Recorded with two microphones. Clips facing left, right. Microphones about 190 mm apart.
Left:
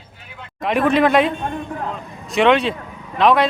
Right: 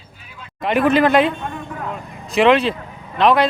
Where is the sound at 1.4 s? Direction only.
35° left (ahead or behind).